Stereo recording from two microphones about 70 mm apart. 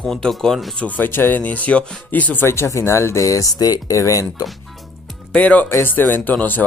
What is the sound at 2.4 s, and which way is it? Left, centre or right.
Speech, left.